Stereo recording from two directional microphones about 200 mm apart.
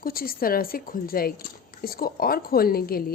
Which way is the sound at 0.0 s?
45° left (ahead or behind).